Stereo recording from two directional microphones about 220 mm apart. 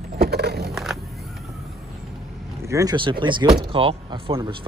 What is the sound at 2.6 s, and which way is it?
Speech, 15° right (ahead or behind).